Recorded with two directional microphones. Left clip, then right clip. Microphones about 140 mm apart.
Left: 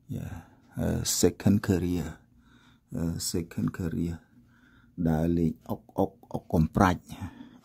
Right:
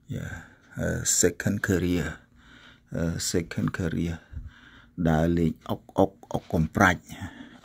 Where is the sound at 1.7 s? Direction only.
10° left (ahead or behind).